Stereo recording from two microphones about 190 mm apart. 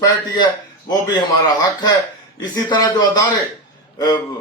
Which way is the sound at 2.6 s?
20° left (ahead or behind).